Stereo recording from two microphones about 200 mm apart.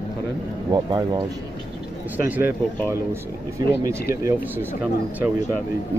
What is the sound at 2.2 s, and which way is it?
Speech, 10° right (ahead or behind).